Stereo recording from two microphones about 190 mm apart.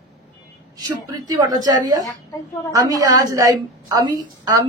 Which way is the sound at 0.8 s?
20° right (ahead or behind).